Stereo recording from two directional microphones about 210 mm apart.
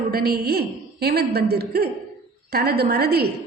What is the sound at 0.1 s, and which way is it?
A woman's voice, 50° right (ahead or behind).